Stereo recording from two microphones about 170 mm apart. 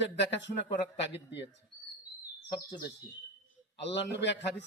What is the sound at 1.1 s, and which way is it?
Speech, 90° left.